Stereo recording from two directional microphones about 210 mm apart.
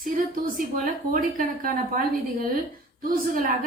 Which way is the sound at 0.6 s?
40° right (ahead or behind).